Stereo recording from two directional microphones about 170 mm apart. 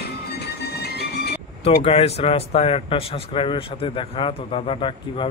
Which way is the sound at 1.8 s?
35° left (ahead or behind).